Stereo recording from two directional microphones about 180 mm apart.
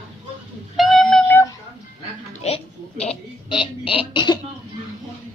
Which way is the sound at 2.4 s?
35° left (ahead or behind).